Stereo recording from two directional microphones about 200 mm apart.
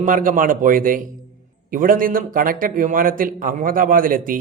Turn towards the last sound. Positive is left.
turn(degrees=-45)  # may be behind; listen again after turning